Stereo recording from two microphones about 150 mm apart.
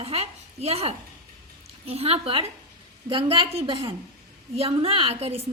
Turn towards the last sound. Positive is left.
turn(degrees=-40)  # may be behind; listen again after turning